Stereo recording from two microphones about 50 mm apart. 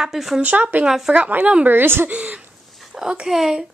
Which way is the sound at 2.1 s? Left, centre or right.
Right.